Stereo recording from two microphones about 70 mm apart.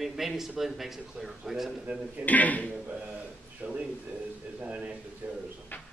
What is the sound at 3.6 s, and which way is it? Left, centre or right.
A man's voice, centre.